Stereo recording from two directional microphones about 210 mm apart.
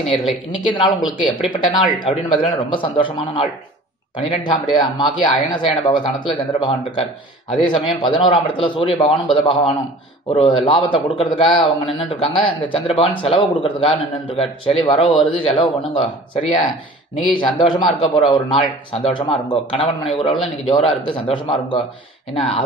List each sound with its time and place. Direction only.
0.0 s speech: centre (ahead or behind)
0.7 s a man's voice: 25° left (ahead or behind)